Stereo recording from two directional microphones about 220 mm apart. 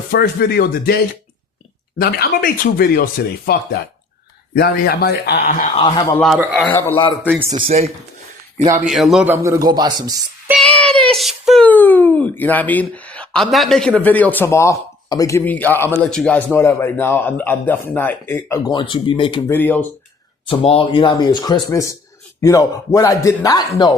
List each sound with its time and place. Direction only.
0.1 s speech: 45° left (ahead or behind)
2.0 s speech: 45° left (ahead or behind)
5.7 s speech: 20° left (ahead or behind)
6.1 s speech: centre (ahead or behind)
6.7 s a man's voice: 10° left (ahead or behind)
6.9 s speech: 20° left (ahead or behind)
7.2 s speech: 5° right (ahead or behind)
7.5 s speech: 25° right (ahead or behind)
8.9 s speech: centre (ahead or behind); by 10.2 s 20° right (ahead or behind)
10.5 s child singing: 5° left (ahead or behind)
11.1 s a man's voice: centre (ahead or behind); by 19.4 s 20° left (ahead or behind)
19.5 s a man's voice: 10° left (ahead or behind)
20.5 s a man's voice: 25° left (ahead or behind)